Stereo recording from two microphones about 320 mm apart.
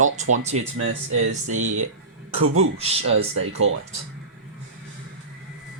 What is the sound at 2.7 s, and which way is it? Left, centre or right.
Speech, centre.